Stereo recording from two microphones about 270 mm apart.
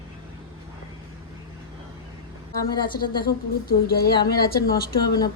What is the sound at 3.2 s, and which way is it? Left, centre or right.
Speech, left.